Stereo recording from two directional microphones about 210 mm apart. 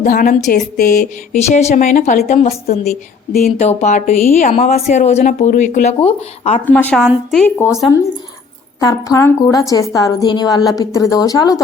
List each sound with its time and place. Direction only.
0.0 s speech: 40° left (ahead or behind)
3.3 s speech: 45° left (ahead or behind)
3.7 s speech: 30° left (ahead or behind)
6.7 s a woman's voice: 10° left (ahead or behind)
8.8 s a woman's voice: 15° left (ahead or behind)